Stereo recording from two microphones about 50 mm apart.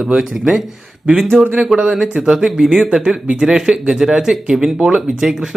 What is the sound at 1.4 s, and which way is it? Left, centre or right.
Speech, right.